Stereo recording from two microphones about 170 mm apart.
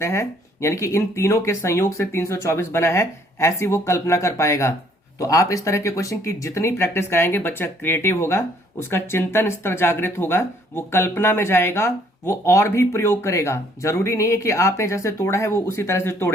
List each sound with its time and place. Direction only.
0.0 s speech: 15° left (ahead or behind)